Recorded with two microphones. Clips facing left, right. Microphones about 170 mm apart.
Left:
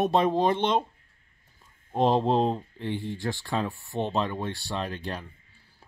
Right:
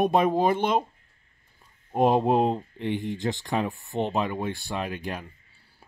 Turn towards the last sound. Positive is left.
turn(degrees=-10)  # may be behind; listen again after turning